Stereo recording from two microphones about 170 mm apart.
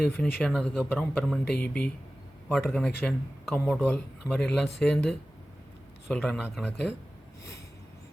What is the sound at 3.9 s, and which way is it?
Speech, 10° left (ahead or behind).